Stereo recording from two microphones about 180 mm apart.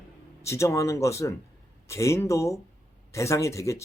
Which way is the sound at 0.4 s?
15° left (ahead or behind).